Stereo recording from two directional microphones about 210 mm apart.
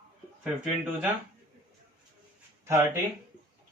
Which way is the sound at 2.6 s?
15° right (ahead or behind).